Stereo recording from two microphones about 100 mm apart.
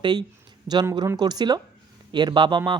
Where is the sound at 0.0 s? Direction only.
45° right (ahead or behind).